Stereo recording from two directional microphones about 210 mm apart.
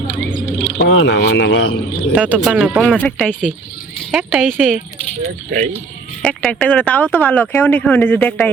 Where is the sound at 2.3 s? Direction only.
5° right (ahead or behind).